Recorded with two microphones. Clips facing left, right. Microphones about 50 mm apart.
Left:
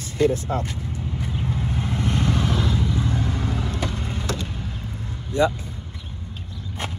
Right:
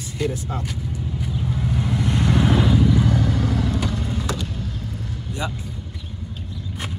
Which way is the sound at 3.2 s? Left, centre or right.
Left.